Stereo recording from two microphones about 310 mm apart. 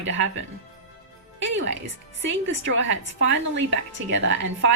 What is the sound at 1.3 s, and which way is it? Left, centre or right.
A woman's voice, right.